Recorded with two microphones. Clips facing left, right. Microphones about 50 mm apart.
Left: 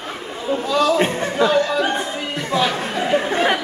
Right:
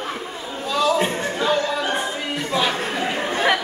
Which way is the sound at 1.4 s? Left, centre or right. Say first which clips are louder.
Left 4 dB; left.